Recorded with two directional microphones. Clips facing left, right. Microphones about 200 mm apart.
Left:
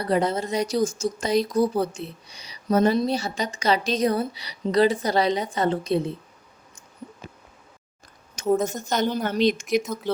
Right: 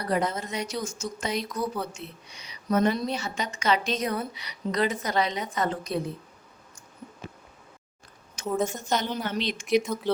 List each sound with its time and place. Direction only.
0.0 s a woman's voice: 30° left (ahead or behind)
8.6 s a woman's voice: 40° left (ahead or behind)
9.8 s speech: 5° left (ahead or behind)